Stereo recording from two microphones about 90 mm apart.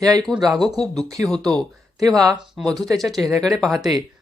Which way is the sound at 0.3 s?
Centre (ahead or behind).